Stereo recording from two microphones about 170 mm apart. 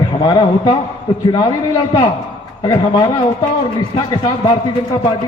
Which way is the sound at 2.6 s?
25° left (ahead or behind).